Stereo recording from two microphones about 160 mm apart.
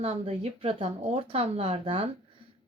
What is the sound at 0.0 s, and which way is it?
A woman's voice, 40° right (ahead or behind).